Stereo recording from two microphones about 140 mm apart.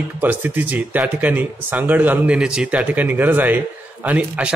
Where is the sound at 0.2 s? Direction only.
15° right (ahead or behind).